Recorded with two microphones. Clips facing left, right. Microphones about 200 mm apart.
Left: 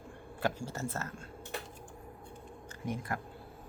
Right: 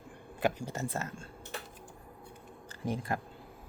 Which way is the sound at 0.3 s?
15° right (ahead or behind).